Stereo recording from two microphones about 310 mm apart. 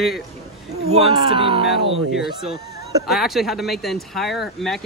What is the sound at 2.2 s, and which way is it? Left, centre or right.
Speech, left.